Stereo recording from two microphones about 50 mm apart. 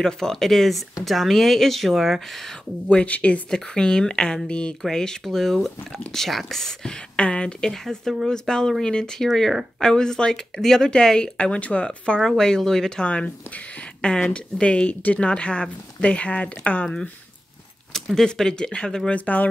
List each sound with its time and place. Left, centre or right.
0.0 s speech: centre
2.9 s speech: left
3.4 s speech: centre
7.2 s speech: left
7.7 s speech: centre; by 12.2 s left
12.2 s speech: centre
13.0 s speech: left
13.7 s a sound: centre
14.3 s speech: left
17.9 s speech: centre
19.1 s speech: left